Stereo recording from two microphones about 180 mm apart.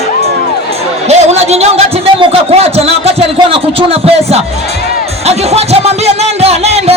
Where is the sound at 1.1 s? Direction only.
35° right (ahead or behind).